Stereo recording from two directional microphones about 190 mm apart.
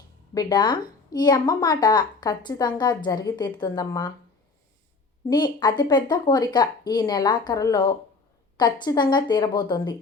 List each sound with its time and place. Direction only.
0.3 s a woman's voice: 25° left (ahead or behind)
5.3 s a woman's voice: 25° left (ahead or behind)